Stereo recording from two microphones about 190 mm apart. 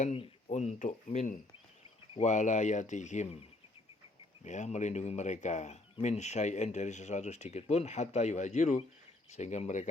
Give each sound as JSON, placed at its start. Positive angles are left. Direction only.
{"t": 0.0, "sound": "speech", "side_deg": 35}
{"t": 4.4, "sound": "speech", "side_deg": 40}